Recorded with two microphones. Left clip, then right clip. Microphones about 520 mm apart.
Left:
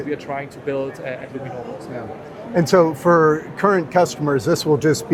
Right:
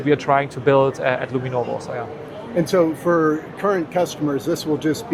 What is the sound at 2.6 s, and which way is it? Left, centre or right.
Speech, left.